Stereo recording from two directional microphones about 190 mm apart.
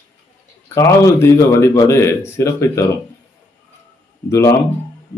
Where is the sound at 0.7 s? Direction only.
15° left (ahead or behind).